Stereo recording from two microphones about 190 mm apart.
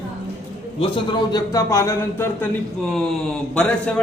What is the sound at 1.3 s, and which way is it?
Speech, 20° left (ahead or behind).